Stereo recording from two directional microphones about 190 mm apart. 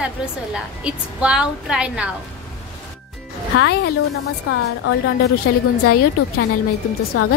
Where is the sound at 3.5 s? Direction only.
60° left (ahead or behind).